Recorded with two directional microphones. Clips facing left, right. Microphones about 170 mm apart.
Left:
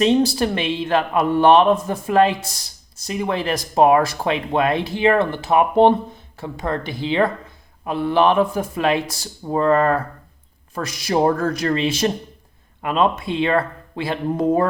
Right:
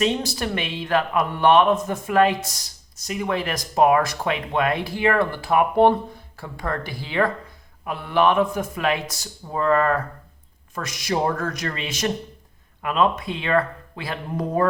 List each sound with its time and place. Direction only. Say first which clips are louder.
0.0 s a man's voice: left 7 dB; 30° left (ahead or behind)